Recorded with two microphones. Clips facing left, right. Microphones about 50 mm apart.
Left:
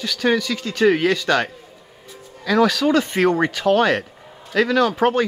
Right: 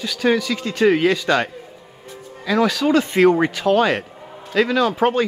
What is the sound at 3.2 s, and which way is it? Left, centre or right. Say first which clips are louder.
Speech: right 2 dB; centre.